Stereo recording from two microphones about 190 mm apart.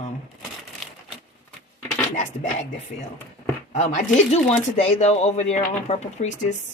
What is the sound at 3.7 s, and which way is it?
Speech, 35° left (ahead or behind).